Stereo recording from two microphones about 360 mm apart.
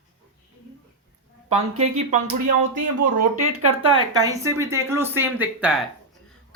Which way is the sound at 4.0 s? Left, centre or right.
Centre.